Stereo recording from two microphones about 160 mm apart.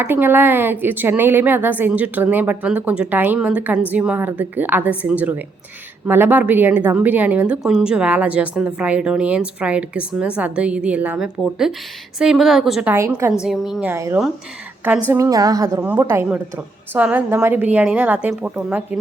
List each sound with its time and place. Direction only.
0.0 s a woman's voice: 15° right (ahead or behind)
12.9 s a woman's voice: 15° right (ahead or behind)
13.4 s a woman's voice: centre (ahead or behind)
13.9 s a woman's voice: 15° right (ahead or behind)